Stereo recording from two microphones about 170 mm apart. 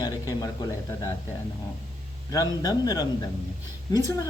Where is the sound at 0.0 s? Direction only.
20° left (ahead or behind).